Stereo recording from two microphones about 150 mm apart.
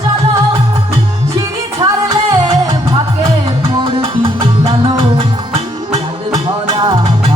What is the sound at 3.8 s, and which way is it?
Music, 35° right (ahead or behind).